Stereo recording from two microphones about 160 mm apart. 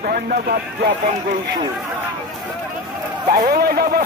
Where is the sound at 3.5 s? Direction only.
70° right (ahead or behind).